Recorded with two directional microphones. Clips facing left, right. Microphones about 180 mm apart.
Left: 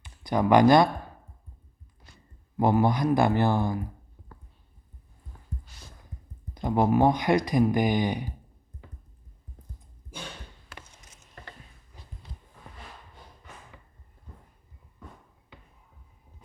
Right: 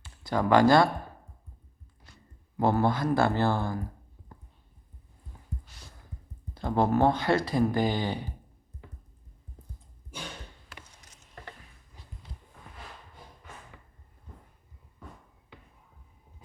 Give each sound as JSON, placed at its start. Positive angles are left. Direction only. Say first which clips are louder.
{"t": 0.0, "sound": "speech", "louder": "left 3 dB", "side_deg": 15}
{"t": 2.6, "sound": "speech", "louder": "left 2 dB", "side_deg": 15}
{"t": 6.5, "sound": "speech", "louder": "left 2 dB", "side_deg": 15}